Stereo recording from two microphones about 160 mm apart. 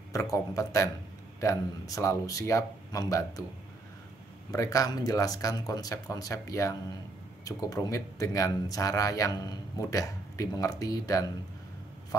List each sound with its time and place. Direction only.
0.1 s speech: 20° left (ahead or behind)
4.5 s speech: 20° left (ahead or behind)